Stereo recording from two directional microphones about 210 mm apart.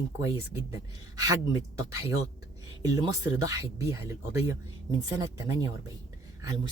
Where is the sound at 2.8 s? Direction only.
20° right (ahead or behind).